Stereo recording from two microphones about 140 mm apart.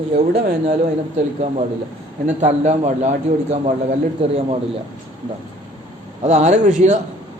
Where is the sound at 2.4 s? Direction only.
55° right (ahead or behind).